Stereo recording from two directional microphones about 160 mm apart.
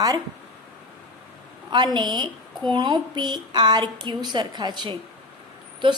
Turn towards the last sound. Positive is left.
turn(degrees=-30)  # may be behind; listen again after turning